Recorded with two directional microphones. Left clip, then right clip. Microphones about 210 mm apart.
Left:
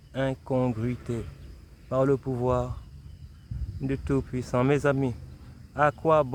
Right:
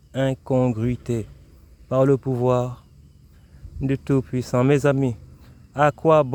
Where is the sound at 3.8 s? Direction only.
40° right (ahead or behind).